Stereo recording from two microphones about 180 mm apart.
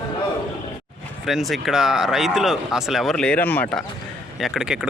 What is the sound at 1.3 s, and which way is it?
Speech, centre (ahead or behind).